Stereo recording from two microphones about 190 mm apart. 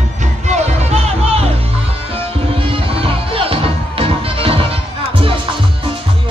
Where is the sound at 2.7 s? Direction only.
30° right (ahead or behind).